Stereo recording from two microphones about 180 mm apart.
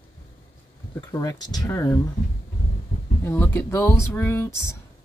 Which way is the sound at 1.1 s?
20° left (ahead or behind).